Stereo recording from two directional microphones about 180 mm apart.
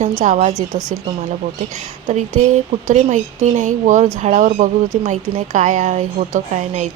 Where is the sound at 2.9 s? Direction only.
40° right (ahead or behind).